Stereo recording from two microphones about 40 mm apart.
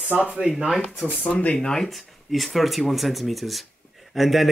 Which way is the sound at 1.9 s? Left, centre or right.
Centre.